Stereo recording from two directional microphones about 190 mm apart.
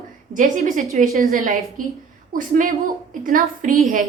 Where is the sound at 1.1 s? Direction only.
50° right (ahead or behind).